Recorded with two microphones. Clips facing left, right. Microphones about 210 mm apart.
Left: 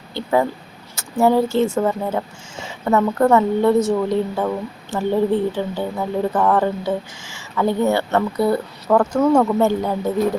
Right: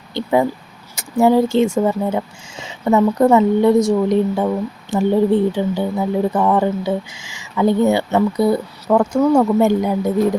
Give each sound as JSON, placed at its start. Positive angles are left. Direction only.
{"t": 0.1, "sound": "speech", "side_deg": -15}